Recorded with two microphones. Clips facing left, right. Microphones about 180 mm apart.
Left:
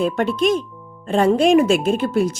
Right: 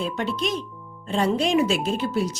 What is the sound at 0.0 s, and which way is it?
A woman's voice, 55° left (ahead or behind).